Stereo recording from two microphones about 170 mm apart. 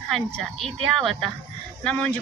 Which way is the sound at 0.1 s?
Centre (ahead or behind).